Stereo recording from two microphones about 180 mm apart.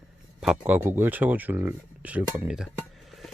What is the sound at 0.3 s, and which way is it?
Speech, 10° right (ahead or behind).